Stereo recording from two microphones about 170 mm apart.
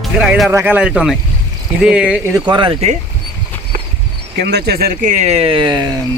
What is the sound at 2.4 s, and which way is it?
Speech, 30° right (ahead or behind).